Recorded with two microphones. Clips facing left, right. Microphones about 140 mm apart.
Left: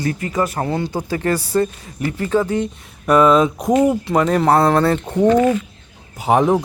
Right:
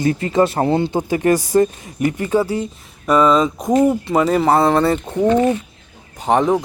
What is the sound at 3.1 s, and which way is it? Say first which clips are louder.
Speech: left 1 dB; 5° left (ahead or behind).